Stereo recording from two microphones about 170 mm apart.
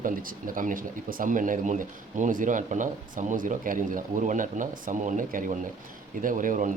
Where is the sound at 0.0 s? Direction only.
55° right (ahead or behind).